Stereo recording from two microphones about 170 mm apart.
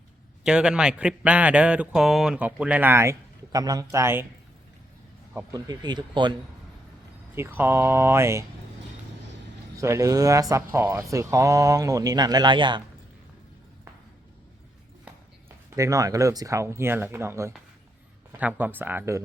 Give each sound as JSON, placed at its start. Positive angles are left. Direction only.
{"t": 0.4, "sound": "speech", "side_deg": -5}
{"t": 5.3, "sound": "speech", "side_deg": -10}
{"t": 5.5, "sound": "speech", "side_deg": -25}
{"t": 7.3, "sound": "speech", "side_deg": -15}
{"t": 9.7, "sound": "speech", "side_deg": -20}
{"t": 15.4, "sound": "speech", "side_deg": -15}